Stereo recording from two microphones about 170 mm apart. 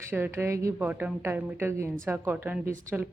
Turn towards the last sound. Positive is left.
turn(degrees=-10)  # may be behind; listen again after turning